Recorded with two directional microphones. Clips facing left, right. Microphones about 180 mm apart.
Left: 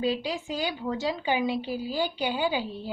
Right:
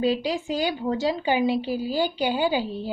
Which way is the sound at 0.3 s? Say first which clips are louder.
Right 5 dB; 40° right (ahead or behind).